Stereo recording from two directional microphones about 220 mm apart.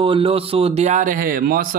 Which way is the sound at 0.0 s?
25° right (ahead or behind).